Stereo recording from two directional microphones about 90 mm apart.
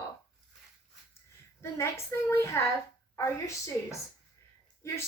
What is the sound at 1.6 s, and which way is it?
A woman's voice, 30° left (ahead or behind).